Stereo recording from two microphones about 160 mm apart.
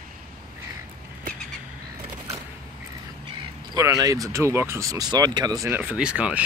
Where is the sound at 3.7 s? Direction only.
20° right (ahead or behind).